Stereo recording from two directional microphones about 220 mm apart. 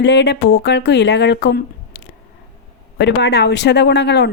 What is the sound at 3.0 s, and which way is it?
Speech, 50° left (ahead or behind).